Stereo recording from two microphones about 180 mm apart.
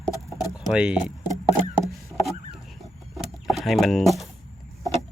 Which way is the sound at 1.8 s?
Centre (ahead or behind).